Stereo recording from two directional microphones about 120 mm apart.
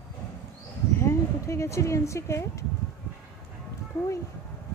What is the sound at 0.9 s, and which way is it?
Speech, 25° left (ahead or behind).